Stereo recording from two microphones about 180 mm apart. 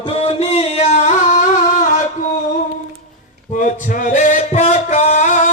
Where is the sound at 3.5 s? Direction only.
45° left (ahead or behind).